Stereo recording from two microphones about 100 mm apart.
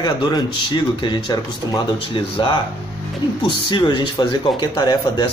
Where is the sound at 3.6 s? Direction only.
50° left (ahead or behind).